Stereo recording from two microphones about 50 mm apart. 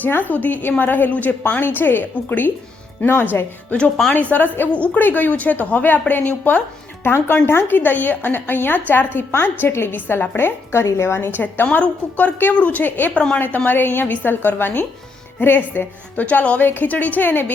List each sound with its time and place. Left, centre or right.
0.0 s a woman's voice: left
3.7 s a woman's voice: left
4.1 s a woman's voice: left
4.7 s a woman's voice: left
5.0 s a woman's voice: left
7.0 s a woman's voice: left
16.2 s a woman's voice: left